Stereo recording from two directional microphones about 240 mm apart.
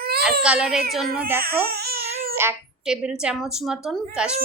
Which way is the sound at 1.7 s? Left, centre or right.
Right.